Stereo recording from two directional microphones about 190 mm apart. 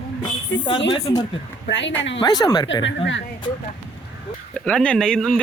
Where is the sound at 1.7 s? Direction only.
70° left (ahead or behind).